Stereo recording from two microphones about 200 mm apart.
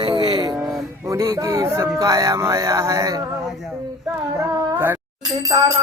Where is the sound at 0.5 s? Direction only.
5° right (ahead or behind).